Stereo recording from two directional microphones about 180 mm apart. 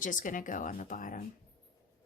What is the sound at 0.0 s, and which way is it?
Speech, 45° left (ahead or behind).